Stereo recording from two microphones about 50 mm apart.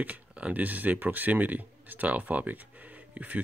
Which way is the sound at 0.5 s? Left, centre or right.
Right.